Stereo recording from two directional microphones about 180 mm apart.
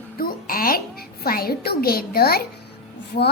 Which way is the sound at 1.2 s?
55° left (ahead or behind).